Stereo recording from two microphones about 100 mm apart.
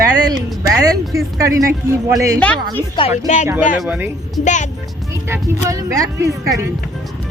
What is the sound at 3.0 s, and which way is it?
Speech, 55° left (ahead or behind).